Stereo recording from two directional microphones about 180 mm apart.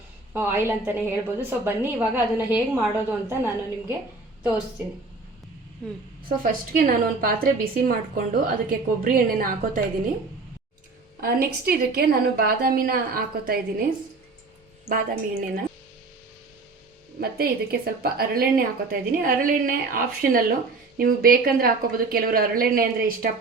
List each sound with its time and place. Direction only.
0.3 s a woman's voice: 10° right (ahead or behind)
6.2 s speech: 50° right (ahead or behind)
11.2 s a woman's voice: 55° right (ahead or behind)
14.8 s a woman's voice: 55° right (ahead or behind)
17.2 s a woman's voice: 60° right (ahead or behind)